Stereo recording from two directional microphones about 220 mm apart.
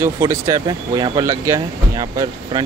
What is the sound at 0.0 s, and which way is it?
Speech, 15° right (ahead or behind).